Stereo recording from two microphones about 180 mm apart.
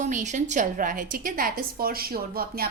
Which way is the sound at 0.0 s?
40° right (ahead or behind).